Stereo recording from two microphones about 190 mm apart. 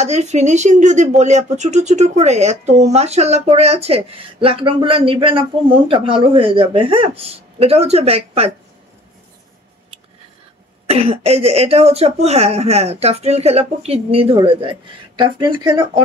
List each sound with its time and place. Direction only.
0.0 s speech: 35° right (ahead or behind)
10.9 s speech: 30° right (ahead or behind)